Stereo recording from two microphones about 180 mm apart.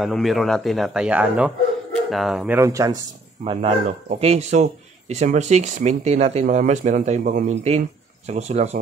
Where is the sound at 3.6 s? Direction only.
35° right (ahead or behind).